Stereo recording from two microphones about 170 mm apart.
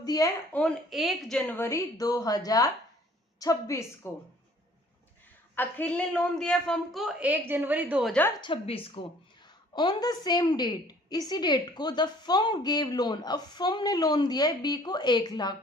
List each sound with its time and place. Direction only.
0.0 s speech: 20° left (ahead or behind)
0.5 s a woman's voice: 5° left (ahead or behind)
5.5 s a woman's voice: 10° left (ahead or behind); by 8.1 s 5° right (ahead or behind)
8.4 s a woman's voice: 30° left (ahead or behind)